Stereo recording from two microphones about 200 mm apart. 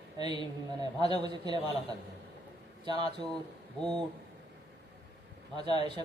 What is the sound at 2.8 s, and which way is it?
Speech, 20° right (ahead or behind).